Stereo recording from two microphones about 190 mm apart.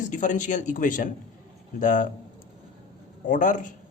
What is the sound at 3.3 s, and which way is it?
Speech, 40° left (ahead or behind).